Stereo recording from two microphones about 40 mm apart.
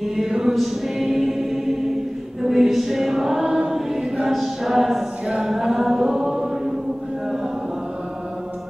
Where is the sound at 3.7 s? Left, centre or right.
Centre.